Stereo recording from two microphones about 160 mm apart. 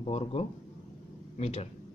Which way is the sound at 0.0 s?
35° left (ahead or behind).